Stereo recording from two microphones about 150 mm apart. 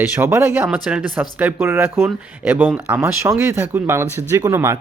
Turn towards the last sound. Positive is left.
turn(degrees=-20)  # may be behind; listen again after turning